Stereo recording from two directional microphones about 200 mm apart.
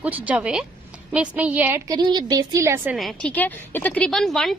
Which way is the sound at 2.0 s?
20° right (ahead or behind).